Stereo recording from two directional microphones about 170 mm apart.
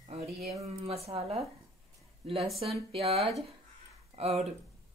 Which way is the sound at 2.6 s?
30° right (ahead or behind).